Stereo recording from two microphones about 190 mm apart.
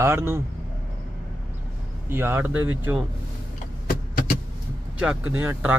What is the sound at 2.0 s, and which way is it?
Speech, 10° right (ahead or behind).